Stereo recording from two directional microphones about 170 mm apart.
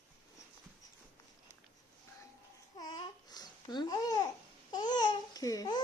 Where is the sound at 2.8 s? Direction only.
25° left (ahead or behind).